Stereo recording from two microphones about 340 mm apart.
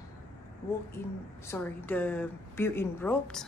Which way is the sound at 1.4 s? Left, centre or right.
Centre.